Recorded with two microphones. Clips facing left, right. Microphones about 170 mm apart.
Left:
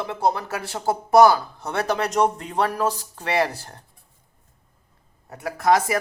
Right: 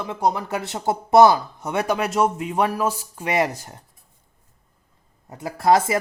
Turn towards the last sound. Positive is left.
turn(degrees=-30)  # may be behind; listen again after turning